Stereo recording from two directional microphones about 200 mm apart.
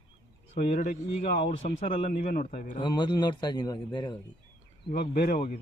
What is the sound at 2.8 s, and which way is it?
A man's voice, 20° left (ahead or behind).